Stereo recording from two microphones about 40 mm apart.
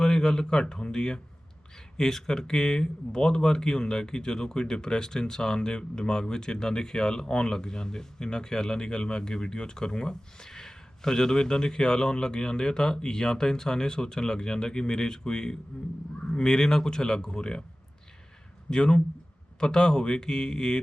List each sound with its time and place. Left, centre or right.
0.0 s speech: centre
18.7 s speech: left